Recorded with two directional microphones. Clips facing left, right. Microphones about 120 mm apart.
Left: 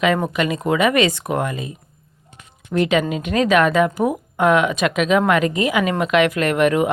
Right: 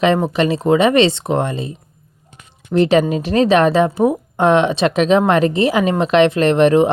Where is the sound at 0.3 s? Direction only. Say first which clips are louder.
Right 5 dB; 30° right (ahead or behind).